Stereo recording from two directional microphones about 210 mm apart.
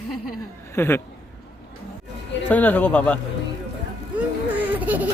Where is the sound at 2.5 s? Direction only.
5° left (ahead or behind).